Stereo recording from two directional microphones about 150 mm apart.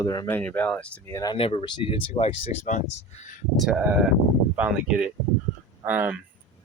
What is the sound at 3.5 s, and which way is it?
Speech, 5° right (ahead or behind).